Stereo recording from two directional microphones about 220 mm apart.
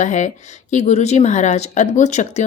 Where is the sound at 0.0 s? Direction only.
35° left (ahead or behind).